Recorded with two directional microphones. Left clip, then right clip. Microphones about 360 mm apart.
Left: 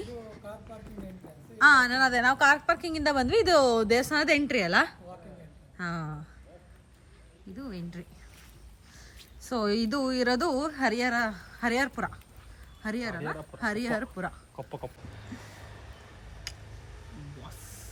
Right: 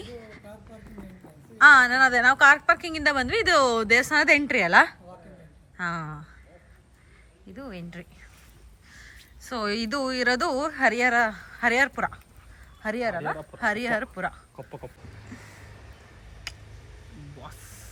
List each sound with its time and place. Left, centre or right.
0.0 s a sound: centre
1.5 s a woman's voice: centre
7.5 s speech: centre
9.4 s a woman's voice: centre
14.5 s speech: left
15.4 s a sound: left
15.8 s tick: centre
17.1 s music: centre